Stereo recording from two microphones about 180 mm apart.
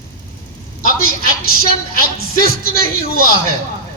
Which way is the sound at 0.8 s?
55° left (ahead or behind).